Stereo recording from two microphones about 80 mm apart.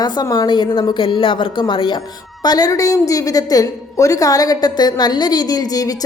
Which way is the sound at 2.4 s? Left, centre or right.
Left.